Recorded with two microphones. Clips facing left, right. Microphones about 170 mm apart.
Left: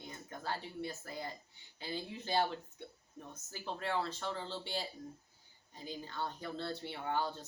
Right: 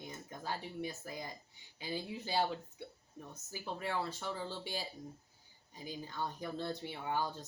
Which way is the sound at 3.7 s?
15° right (ahead or behind).